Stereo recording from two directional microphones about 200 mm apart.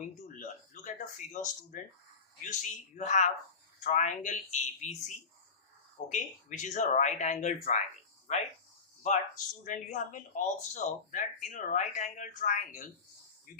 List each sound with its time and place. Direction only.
0.3 s a sound: 40° left (ahead or behind)
2.4 s speech: 40° left (ahead or behind)
9.6 s speech: 40° left (ahead or behind)